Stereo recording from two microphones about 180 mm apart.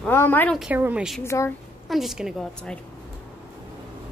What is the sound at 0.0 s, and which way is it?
Speech, 10° left (ahead or behind).